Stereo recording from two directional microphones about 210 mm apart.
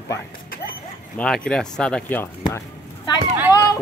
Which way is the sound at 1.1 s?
5° left (ahead or behind).